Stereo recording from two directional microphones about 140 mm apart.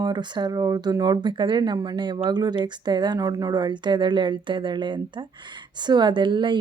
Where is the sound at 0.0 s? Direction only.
30° right (ahead or behind).